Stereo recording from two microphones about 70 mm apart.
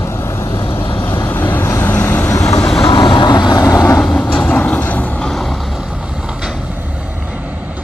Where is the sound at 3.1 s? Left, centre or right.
Left.